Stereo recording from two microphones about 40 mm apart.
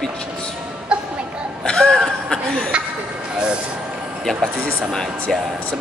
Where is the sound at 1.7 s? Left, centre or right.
Left.